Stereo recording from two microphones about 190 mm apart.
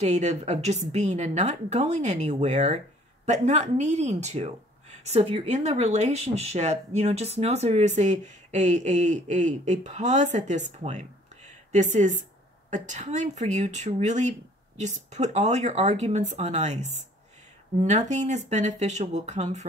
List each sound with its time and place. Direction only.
0.0 s speech: 35° right (ahead or behind)